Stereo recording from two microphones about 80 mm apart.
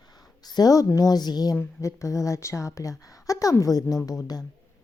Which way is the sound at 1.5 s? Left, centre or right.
Left.